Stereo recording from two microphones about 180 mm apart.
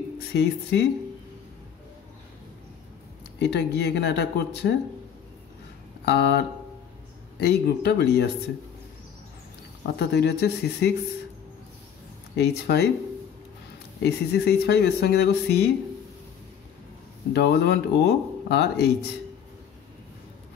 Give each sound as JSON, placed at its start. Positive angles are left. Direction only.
{"t": 0.3, "sound": "speech", "side_deg": 70}
{"t": 3.3, "sound": "speech", "side_deg": 70}
{"t": 6.0, "sound": "speech", "side_deg": 70}
{"t": 9.9, "sound": "speech", "side_deg": 65}
{"t": 12.4, "sound": "speech", "side_deg": 65}
{"t": 14.0, "sound": "speech", "side_deg": 65}
{"t": 17.3, "sound": "speech", "side_deg": 65}